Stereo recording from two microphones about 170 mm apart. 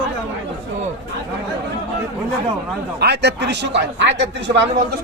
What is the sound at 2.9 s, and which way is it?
Speech, 75° right (ahead or behind).